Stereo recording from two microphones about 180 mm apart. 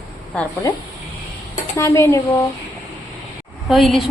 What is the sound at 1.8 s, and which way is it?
Speech, 15° left (ahead or behind).